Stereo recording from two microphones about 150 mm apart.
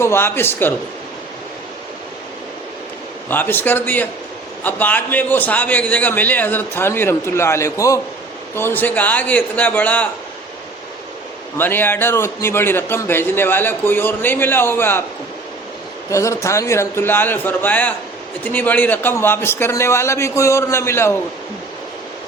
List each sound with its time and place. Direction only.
0.0 s a man's voice: 15° left (ahead or behind)
3.2 s a man's voice: 15° left (ahead or behind)
11.5 s a man's voice: 15° left (ahead or behind)
16.0 s a man's voice: 20° left (ahead or behind)